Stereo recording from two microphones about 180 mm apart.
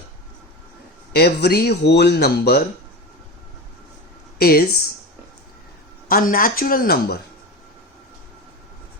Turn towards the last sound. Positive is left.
turn(degrees=55)  # may be behind; listen again after turning